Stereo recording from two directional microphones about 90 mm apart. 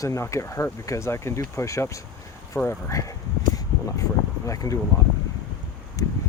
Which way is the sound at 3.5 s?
40° left (ahead or behind).